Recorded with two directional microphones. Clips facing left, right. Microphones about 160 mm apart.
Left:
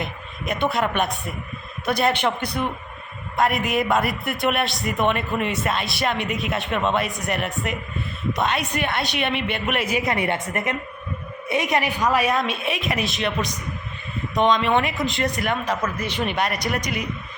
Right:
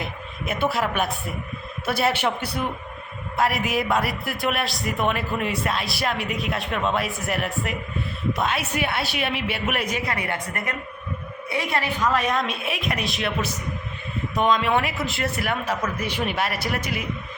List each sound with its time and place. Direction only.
0.0 s a man's voice: 5° right (ahead or behind)
10.1 s a woman's voice: 25° left (ahead or behind); by 17.1 s 5° right (ahead or behind)